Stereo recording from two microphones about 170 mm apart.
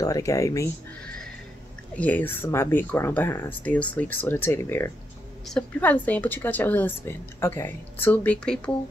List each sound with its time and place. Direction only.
0.0 s speech: 20° left (ahead or behind)
2.0 s a woman's voice: 10° left (ahead or behind)